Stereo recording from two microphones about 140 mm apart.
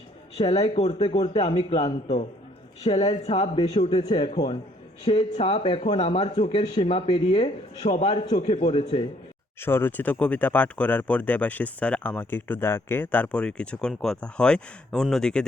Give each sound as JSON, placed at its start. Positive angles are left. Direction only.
{"t": 0.3, "sound": "speech", "side_deg": 45}
{"t": 7.9, "sound": "a man's voice", "side_deg": 50}
{"t": 9.6, "sound": "speech", "side_deg": 15}